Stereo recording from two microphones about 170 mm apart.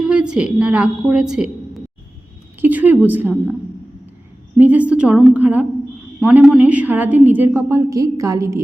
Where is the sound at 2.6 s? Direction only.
10° right (ahead or behind).